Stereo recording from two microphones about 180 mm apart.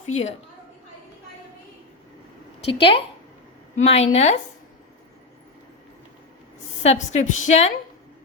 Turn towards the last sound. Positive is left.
turn(degrees=40)  # may be behind; listen again after turning